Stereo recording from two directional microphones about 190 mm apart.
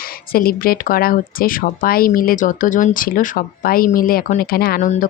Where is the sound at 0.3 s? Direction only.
50° left (ahead or behind).